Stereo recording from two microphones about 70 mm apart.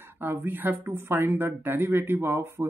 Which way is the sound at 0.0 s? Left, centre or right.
Right.